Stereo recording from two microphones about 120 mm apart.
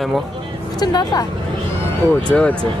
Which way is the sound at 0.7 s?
35° left (ahead or behind).